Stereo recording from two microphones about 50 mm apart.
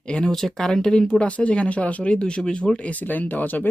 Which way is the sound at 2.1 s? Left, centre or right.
Centre.